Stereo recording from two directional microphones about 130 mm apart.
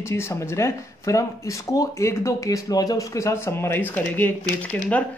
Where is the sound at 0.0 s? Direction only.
20° left (ahead or behind).